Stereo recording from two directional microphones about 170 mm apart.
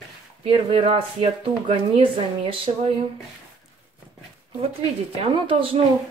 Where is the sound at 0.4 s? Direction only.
35° right (ahead or behind).